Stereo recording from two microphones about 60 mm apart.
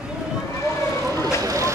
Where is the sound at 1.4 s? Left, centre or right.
Right.